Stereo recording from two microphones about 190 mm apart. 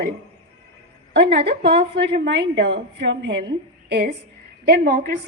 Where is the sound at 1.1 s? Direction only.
65° right (ahead or behind).